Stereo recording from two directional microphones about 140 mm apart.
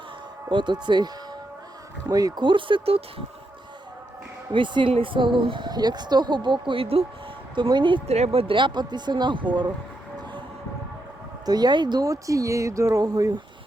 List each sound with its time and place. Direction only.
0.5 s speech: 35° right (ahead or behind)
4.5 s speech: 35° right (ahead or behind)
8.0 s speech: 50° right (ahead or behind); by 9.7 s 35° right (ahead or behind)
11.4 s speech: 30° right (ahead or behind)